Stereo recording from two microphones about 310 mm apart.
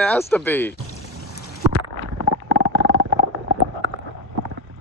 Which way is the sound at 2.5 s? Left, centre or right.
Right.